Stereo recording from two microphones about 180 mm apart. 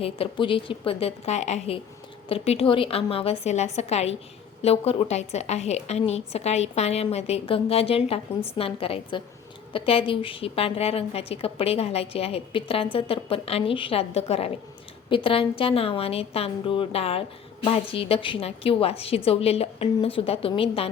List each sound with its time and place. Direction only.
0.0 s a woman's voice: 30° left (ahead or behind)